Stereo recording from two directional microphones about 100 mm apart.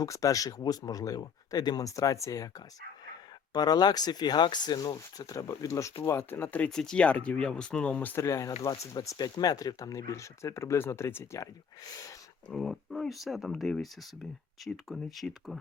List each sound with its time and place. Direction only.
0.0 s speech: 35° left (ahead or behind)
3.5 s speech: 40° left (ahead or behind); by 6.7 s 20° left (ahead or behind)
6.7 s speech: 5° left (ahead or behind); by 9.0 s 30° left (ahead or behind)
9.0 s speech: 45° left (ahead or behind)
12.5 s speech: centre (ahead or behind)